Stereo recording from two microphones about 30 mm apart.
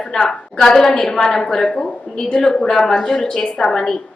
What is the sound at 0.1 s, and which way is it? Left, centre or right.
A woman's voice, centre.